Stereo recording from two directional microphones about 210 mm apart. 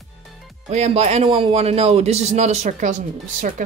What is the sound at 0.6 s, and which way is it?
A man's voice, 30° right (ahead or behind).